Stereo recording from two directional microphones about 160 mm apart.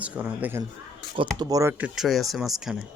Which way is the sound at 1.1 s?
30° right (ahead or behind).